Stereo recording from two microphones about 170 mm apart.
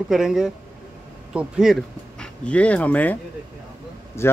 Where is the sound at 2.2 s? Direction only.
5° left (ahead or behind).